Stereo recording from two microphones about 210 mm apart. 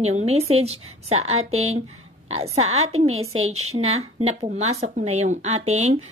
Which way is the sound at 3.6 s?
90° right.